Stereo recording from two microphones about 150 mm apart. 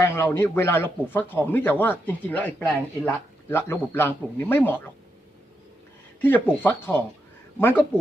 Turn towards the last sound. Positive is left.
turn(degrees=15)  # may be behind; listen again after turning